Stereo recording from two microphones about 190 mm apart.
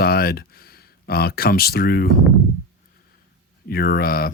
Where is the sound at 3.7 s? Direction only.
55° left (ahead or behind).